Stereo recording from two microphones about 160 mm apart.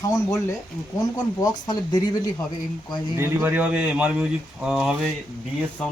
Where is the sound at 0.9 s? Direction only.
20° left (ahead or behind).